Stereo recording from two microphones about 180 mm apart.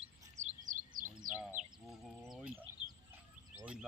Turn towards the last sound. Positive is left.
turn(degrees=-5)  # may be behind; listen again after turning